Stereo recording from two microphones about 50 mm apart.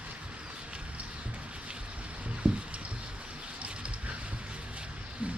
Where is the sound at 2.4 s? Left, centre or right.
Right.